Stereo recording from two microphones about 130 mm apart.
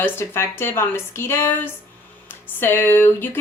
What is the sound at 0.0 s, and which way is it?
A woman's voice, 15° left (ahead or behind).